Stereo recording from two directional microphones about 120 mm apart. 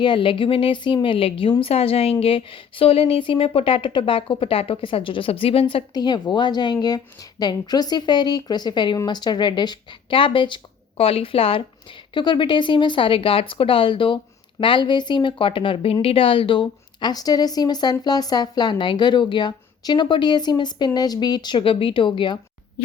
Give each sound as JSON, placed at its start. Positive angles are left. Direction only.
{"t": 0.0, "sound": "speech", "side_deg": 45}
{"t": 5.9, "sound": "a woman's voice", "side_deg": 35}
{"t": 12.1, "sound": "a woman's voice", "side_deg": 40}